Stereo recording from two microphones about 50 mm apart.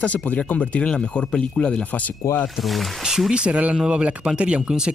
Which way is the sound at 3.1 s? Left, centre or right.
Centre.